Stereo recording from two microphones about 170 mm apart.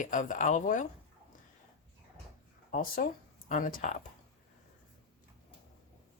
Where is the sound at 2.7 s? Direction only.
55° left (ahead or behind).